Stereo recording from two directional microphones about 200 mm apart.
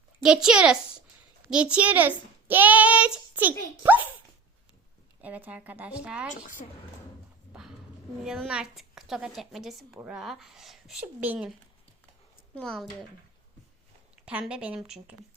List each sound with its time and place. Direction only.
0.2 s a woman's voice: 5° right (ahead or behind)
5.2 s a child's voice: 10° right (ahead or behind)
6.3 s a woman's voice: 40° left (ahead or behind)
8.2 s a woman's voice: 5° right (ahead or behind)
12.5 s a woman's voice: 5° left (ahead or behind)
14.3 s a woman's voice: 5° right (ahead or behind)